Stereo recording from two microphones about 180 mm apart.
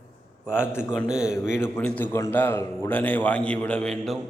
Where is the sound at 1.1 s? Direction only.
5° right (ahead or behind).